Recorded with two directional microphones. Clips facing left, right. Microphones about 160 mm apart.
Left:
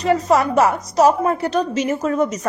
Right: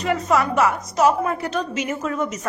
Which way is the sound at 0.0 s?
35° left (ahead or behind).